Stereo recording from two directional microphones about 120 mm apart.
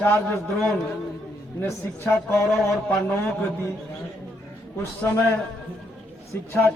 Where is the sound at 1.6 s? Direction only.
15° left (ahead or behind).